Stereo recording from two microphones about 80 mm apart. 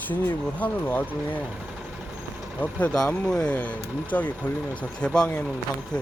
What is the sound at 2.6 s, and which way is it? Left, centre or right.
Speech, centre.